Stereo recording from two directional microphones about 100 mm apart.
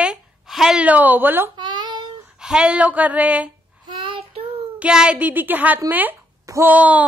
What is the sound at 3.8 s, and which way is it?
Child singing, 60° right (ahead or behind).